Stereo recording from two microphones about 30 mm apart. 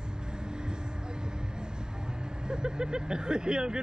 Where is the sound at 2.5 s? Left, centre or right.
Right.